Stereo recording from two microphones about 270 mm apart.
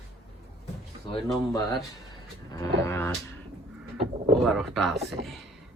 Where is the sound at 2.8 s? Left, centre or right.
Centre.